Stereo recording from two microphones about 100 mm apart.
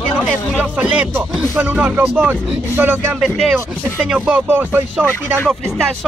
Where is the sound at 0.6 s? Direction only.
10° right (ahead or behind).